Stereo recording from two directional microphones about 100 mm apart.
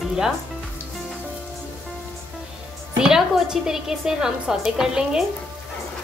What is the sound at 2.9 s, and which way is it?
A woman's voice, 5° right (ahead or behind).